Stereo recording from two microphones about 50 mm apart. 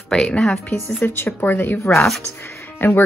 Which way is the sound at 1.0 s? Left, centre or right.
Left.